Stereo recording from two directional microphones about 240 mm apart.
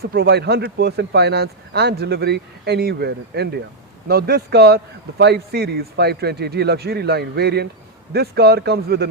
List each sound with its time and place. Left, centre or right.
0.0 s a man's voice: right